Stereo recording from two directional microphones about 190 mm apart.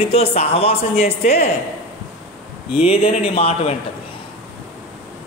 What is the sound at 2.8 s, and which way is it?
Speech, 30° left (ahead or behind).